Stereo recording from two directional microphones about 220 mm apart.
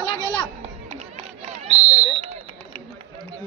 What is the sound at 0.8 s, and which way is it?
Run, 30° right (ahead or behind).